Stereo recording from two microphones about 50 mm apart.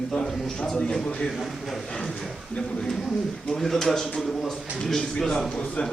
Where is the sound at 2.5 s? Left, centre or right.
Centre.